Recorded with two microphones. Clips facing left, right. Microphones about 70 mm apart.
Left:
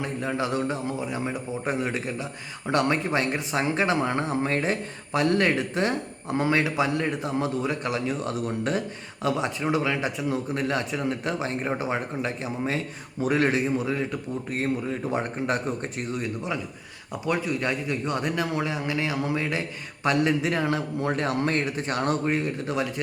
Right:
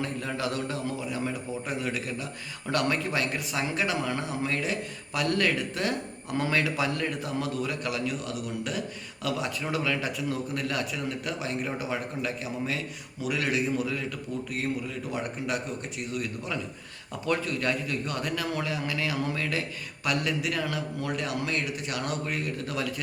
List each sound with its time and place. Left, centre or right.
0.0 s a man's voice: left